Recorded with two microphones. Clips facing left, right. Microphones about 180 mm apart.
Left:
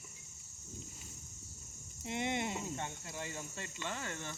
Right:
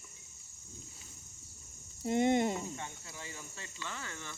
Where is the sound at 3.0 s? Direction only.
50° left (ahead or behind).